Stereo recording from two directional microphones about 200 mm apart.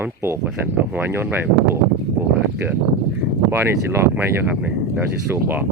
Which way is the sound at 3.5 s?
10° right (ahead or behind).